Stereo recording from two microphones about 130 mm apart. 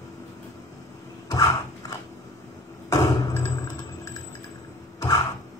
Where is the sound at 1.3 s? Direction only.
30° left (ahead or behind).